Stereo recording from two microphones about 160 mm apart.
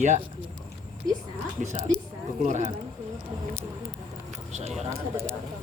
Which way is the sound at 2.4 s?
50° right (ahead or behind).